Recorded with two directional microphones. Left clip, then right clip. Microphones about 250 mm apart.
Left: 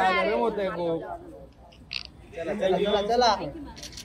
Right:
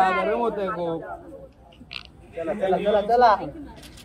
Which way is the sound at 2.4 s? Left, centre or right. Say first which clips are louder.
Right 2 dB; left.